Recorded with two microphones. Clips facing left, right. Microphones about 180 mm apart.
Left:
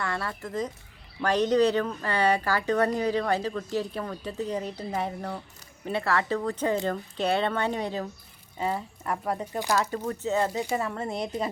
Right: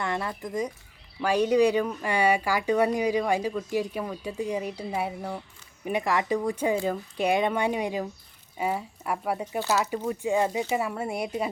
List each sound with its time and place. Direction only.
0.0 s speech: 20° right (ahead or behind)